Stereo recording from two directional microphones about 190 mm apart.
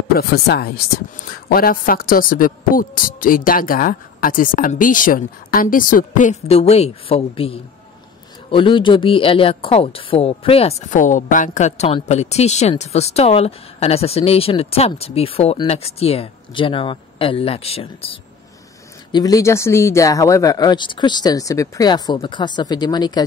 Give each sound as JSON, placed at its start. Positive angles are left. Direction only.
{"t": 0.2, "sound": "a woman's voice", "side_deg": 55}
{"t": 19.1, "sound": "speech", "side_deg": 20}